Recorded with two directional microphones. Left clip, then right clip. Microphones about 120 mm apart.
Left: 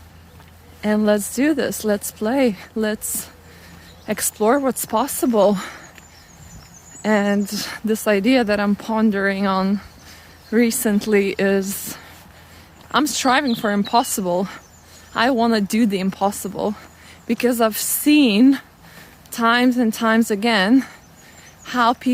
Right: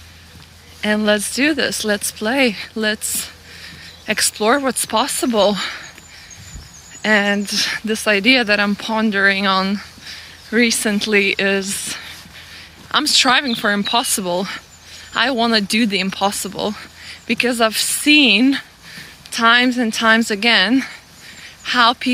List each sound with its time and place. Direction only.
0.8 s speech: 25° left (ahead or behind)
7.0 s speech: 30° left (ahead or behind)